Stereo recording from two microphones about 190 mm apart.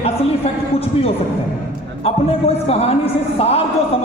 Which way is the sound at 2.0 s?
30° left (ahead or behind).